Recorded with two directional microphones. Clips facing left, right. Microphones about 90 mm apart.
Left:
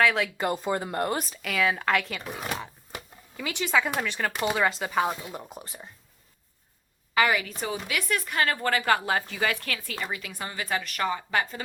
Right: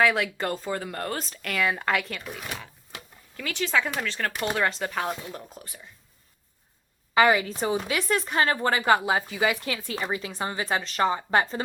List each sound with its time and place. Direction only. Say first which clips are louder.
0.0 s speech: right 1 dB; 5° right (ahead or behind)
0.3 s speech: left 2 dB; 15° left (ahead or behind)
1.3 s speech: left 1 dB; centre (ahead or behind)
2.2 s shuffling cards: left 3 dB; 30° left (ahead or behind)
3.3 s speech: even; 15° left (ahead or behind)
7.1 s speech: right 4 dB; 25° right (ahead or behind)